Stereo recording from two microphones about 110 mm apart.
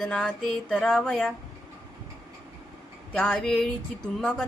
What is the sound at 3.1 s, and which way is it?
Speech, 5° left (ahead or behind).